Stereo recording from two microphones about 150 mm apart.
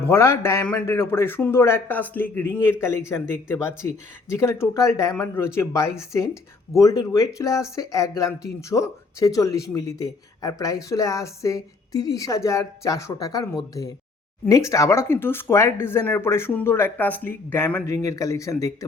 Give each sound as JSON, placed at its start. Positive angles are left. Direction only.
{"t": 0.0, "sound": "speech", "side_deg": 15}